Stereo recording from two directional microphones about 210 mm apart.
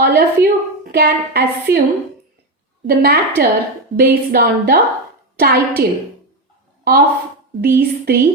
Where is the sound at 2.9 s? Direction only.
45° right (ahead or behind).